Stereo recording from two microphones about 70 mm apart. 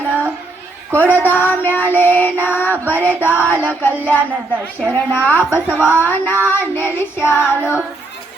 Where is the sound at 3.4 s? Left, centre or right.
Left.